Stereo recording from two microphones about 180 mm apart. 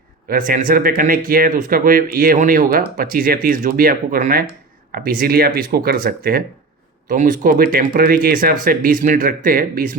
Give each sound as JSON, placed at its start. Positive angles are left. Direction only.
{"t": 0.3, "sound": "speech", "side_deg": -50}